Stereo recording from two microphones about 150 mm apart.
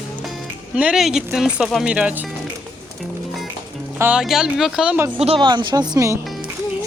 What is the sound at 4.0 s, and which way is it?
Speech, 5° right (ahead or behind).